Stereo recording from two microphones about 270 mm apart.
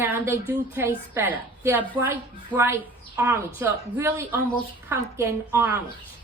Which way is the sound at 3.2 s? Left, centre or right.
Centre.